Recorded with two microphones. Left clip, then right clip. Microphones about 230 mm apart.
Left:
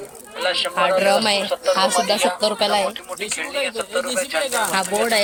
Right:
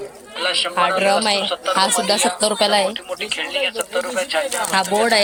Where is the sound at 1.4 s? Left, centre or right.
Right.